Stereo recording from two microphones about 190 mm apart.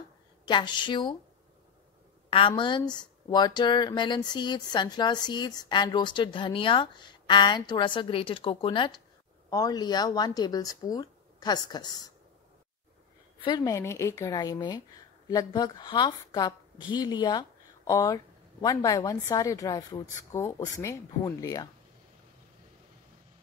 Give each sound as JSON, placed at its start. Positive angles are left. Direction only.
{"t": 0.5, "sound": "a woman's voice", "side_deg": 25}
{"t": 2.2, "sound": "a woman's voice", "side_deg": 25}
{"t": 13.4, "sound": "a woman's voice", "side_deg": 25}